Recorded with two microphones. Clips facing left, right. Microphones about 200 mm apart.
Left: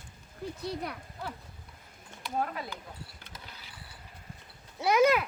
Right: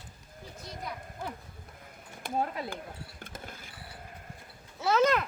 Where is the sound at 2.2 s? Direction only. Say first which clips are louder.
Right 2 dB; 50° right (ahead or behind).